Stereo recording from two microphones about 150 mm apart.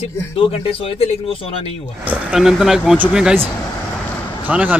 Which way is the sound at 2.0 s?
5° right (ahead or behind).